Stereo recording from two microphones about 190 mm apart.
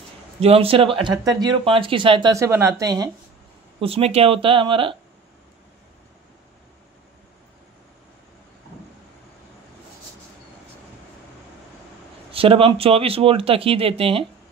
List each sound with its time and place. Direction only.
0.4 s speech: 30° right (ahead or behind)
3.8 s speech: 30° right (ahead or behind)
12.3 s speech: 30° right (ahead or behind)